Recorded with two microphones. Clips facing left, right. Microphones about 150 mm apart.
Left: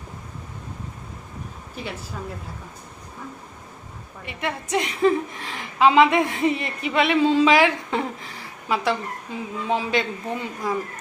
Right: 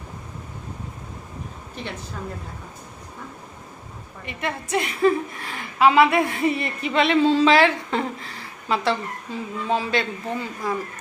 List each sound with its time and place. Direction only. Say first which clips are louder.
1.8 s a woman's voice: even; 5° left (ahead or behind)
4.3 s a woman's voice: even; 15° left (ahead or behind)